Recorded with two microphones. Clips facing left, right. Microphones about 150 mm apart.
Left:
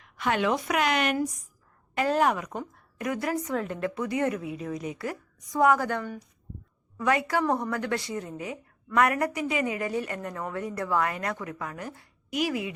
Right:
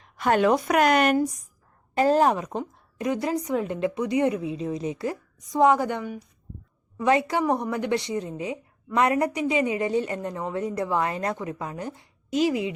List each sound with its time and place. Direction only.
0.0 s a woman's voice: 40° right (ahead or behind)
2.0 s a woman's voice: 35° right (ahead or behind)